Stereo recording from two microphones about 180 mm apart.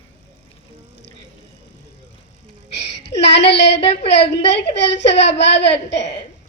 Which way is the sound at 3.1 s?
75° left (ahead or behind).